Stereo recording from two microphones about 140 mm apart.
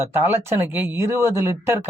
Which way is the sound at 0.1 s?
15° right (ahead or behind).